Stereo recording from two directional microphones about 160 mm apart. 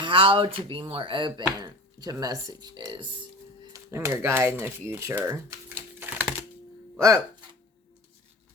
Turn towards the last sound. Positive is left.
turn(degrees=-20)  # may be behind; listen again after turning